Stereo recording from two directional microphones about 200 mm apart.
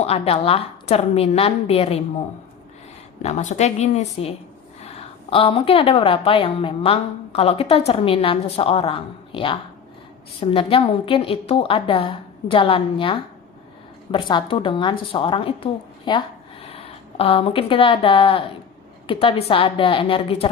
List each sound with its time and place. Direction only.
0.0 s a woman's voice: 30° left (ahead or behind)
3.2 s a woman's voice: 35° left (ahead or behind)